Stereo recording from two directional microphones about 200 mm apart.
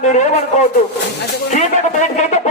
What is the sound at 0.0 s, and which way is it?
Speech, 35° left (ahead or behind).